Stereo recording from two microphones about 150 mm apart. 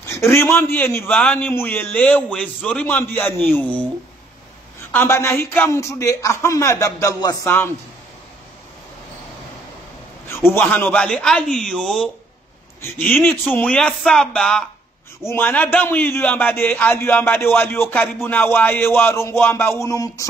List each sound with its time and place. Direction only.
0.0 s a man's voice: 15° left (ahead or behind)
10.2 s a man's voice: 15° left (ahead or behind)